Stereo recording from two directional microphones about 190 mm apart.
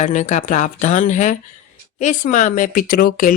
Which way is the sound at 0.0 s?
40° left (ahead or behind).